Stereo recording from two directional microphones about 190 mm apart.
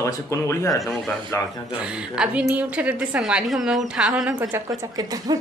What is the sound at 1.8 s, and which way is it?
Speech, 5° right (ahead or behind).